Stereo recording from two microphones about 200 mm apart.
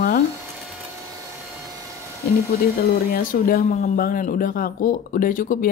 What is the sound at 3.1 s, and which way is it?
Speech, 50° left (ahead or behind).